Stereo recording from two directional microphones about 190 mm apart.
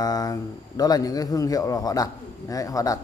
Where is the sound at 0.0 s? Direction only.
20° left (ahead or behind).